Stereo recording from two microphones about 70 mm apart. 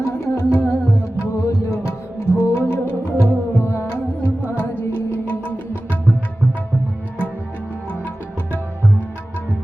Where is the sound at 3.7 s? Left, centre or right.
Left.